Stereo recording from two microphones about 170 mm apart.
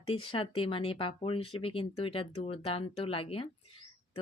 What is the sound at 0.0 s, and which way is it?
Speech, 35° left (ahead or behind).